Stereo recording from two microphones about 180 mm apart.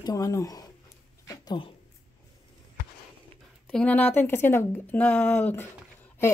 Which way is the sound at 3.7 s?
5° left (ahead or behind).